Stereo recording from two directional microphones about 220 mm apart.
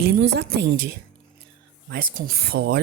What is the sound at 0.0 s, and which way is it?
Speech, 50° right (ahead or behind).